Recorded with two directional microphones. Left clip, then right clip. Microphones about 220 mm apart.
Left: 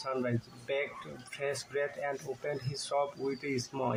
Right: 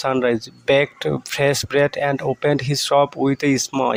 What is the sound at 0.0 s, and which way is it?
Speech, 50° right (ahead or behind).